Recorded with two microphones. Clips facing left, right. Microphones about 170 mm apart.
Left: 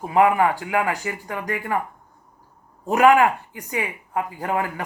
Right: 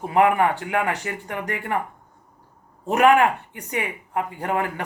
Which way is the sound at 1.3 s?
25° right (ahead or behind).